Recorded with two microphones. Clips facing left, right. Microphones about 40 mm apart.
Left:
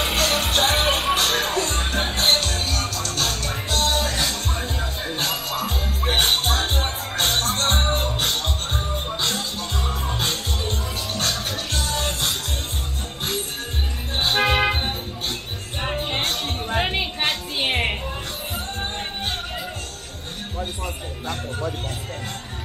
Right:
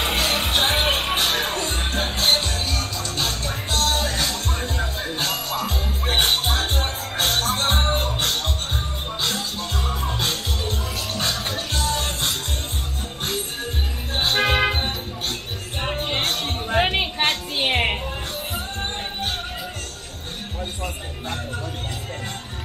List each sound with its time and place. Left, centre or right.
0.2 s music: centre
2.2 s music: centre
7.5 s music: centre
14.1 s music: centre
16.6 s a sound: centre
17.6 s music: centre